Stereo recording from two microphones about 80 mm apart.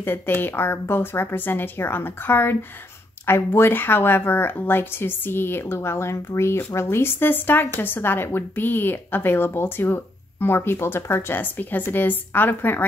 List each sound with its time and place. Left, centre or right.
0.0 s speech: left